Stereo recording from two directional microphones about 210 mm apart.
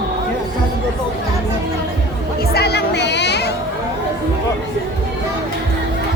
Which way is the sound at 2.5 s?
50° left (ahead or behind).